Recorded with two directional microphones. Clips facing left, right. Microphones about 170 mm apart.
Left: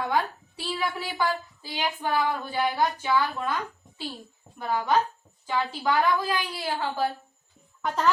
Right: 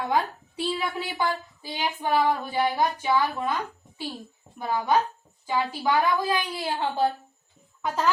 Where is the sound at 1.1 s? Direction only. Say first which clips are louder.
Even; 15° right (ahead or behind).